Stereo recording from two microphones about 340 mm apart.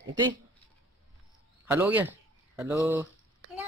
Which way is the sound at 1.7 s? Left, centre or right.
Centre.